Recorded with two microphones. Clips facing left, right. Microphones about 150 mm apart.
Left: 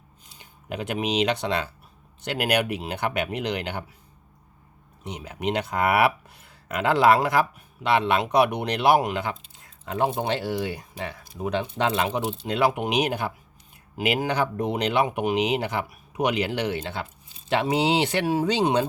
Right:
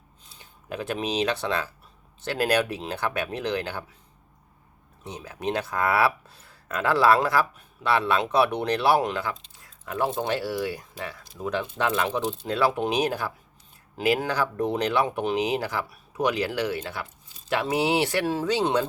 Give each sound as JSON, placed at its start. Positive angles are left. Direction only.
{"t": 0.3, "sound": "speech", "side_deg": 20}
{"t": 5.0, "sound": "speech", "side_deg": 20}
{"t": 9.6, "sound": "a sound", "side_deg": 25}
{"t": 10.1, "sound": "speech", "side_deg": 20}